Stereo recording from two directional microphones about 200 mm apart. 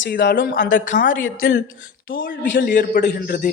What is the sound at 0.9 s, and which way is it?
Speech, 35° left (ahead or behind).